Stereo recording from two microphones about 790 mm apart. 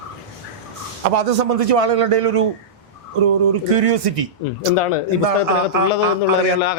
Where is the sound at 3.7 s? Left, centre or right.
Right.